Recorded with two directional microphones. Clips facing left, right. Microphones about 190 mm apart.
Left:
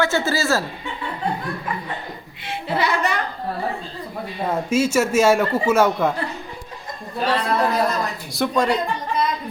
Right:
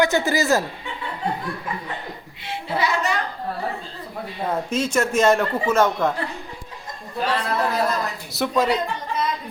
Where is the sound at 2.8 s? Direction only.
60° left (ahead or behind).